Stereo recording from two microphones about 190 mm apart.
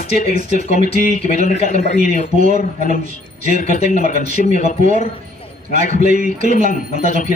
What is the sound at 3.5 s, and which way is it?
Speech, 35° left (ahead or behind).